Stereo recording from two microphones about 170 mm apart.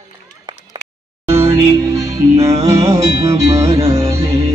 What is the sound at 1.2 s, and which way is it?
Music, 15° right (ahead or behind).